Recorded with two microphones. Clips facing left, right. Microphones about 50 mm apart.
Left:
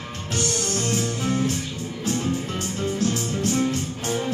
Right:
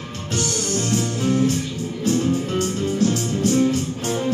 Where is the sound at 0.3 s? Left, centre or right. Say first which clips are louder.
Right 2 dB; centre.